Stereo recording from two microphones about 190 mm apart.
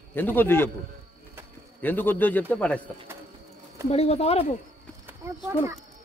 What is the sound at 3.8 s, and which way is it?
Speech, 35° left (ahead or behind).